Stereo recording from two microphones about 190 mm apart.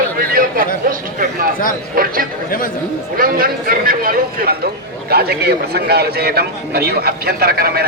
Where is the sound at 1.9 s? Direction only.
50° right (ahead or behind).